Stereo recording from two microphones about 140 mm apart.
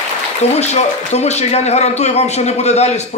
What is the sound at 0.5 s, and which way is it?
A man's voice, 50° left (ahead or behind).